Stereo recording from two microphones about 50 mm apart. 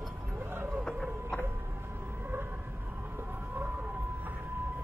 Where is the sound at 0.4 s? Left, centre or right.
Right.